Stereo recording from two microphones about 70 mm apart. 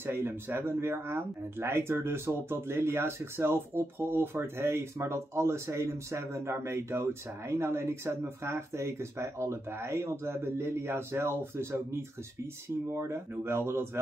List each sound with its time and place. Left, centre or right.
0.0 s speech: right